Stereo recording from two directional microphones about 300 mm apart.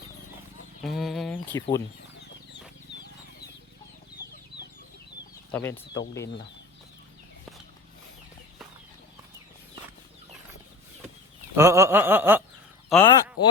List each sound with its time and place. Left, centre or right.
0.8 s speech: centre
4.5 s chicken: left
5.5 s speech: centre
11.5 s a sound: centre
12.9 s speech: centre